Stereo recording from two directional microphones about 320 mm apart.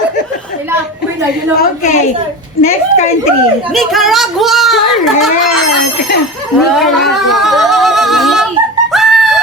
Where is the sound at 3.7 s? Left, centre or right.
Centre.